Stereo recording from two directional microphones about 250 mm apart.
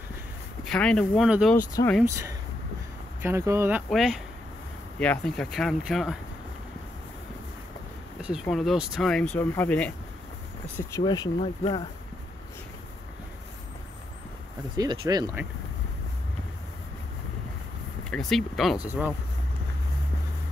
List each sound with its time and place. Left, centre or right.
0.7 s speech: centre
1.7 s speech: centre
2.0 s speech: centre
8.2 s speech: centre
14.8 s speech: centre
18.1 s speech: centre